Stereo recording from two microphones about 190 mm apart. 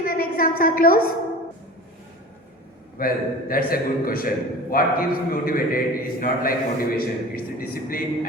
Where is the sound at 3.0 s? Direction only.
50° left (ahead or behind).